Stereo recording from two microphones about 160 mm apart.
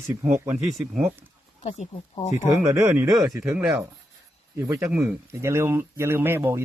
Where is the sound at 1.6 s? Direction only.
45° left (ahead or behind).